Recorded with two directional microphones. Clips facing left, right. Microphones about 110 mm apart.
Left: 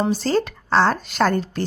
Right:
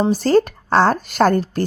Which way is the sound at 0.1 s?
45° right (ahead or behind).